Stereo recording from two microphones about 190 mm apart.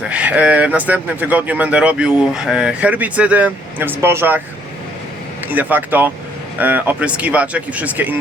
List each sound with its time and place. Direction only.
0.0 s speech: 5° right (ahead or behind)
5.5 s speech: 10° right (ahead or behind)